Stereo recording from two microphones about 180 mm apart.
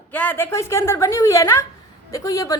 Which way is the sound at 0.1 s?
10° left (ahead or behind).